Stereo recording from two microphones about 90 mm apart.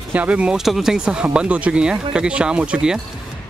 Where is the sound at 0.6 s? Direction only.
5° right (ahead or behind).